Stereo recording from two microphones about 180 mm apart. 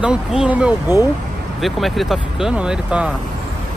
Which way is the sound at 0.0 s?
5° right (ahead or behind).